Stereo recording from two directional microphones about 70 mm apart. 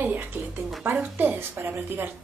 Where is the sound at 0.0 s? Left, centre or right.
Right.